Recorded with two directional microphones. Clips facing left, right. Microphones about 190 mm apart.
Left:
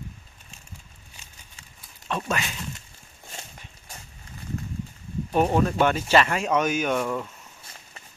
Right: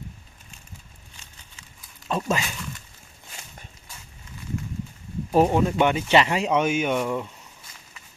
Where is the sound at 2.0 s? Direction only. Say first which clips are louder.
Right 3 dB; 30° right (ahead or behind).